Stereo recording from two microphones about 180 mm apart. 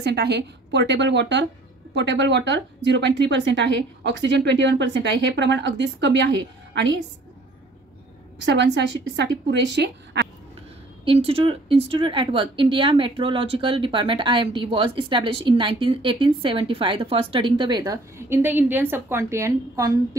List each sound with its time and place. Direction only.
0.0 s a woman's voice: 65° right (ahead or behind)
8.5 s a woman's voice: 90° right
11.1 s a woman's voice: 30° right (ahead or behind)